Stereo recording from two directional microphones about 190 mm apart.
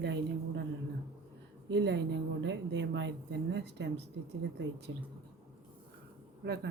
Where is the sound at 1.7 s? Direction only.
65° right (ahead or behind).